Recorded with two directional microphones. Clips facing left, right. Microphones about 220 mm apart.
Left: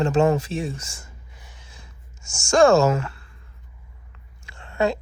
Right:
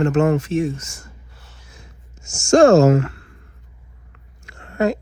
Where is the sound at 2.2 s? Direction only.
40° right (ahead or behind).